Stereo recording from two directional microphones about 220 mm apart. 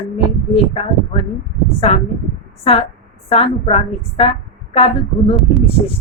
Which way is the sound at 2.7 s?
25° left (ahead or behind).